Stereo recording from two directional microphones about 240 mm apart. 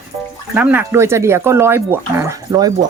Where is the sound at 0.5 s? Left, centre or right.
Centre.